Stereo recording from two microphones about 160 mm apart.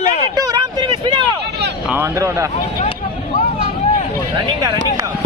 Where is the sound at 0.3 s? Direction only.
25° right (ahead or behind).